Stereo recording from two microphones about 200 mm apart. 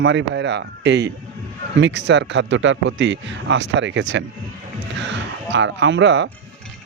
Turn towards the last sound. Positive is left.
turn(degrees=-65)  # may be behind; listen again after turning